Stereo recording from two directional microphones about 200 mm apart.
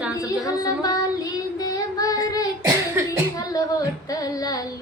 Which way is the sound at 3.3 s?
15° left (ahead or behind).